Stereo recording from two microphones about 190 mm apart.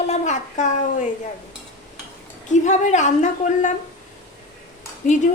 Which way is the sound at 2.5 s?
40° left (ahead or behind).